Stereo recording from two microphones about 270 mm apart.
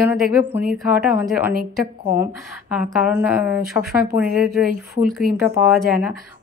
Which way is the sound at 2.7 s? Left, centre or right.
Centre.